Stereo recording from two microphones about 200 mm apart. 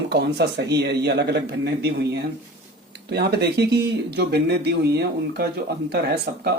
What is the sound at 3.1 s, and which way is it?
Speech, 55° right (ahead or behind).